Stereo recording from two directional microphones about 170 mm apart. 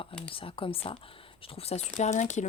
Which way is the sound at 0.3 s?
30° left (ahead or behind).